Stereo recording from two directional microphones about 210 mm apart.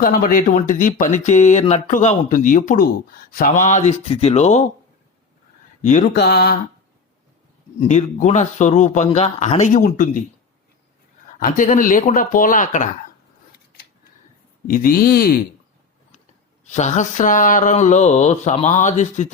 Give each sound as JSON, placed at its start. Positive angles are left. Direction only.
{"t": 0.0, "sound": "speech", "side_deg": 40}
{"t": 5.8, "sound": "speech", "side_deg": 40}
{"t": 7.8, "sound": "speech", "side_deg": 35}
{"t": 11.3, "sound": "speech", "side_deg": 40}
{"t": 14.7, "sound": "speech", "side_deg": 40}
{"t": 16.6, "sound": "speech", "side_deg": 35}